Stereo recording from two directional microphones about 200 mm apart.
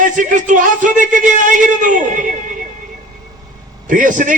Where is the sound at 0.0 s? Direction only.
40° right (ahead or behind).